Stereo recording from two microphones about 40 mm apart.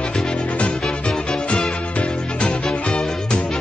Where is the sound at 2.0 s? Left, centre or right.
Left.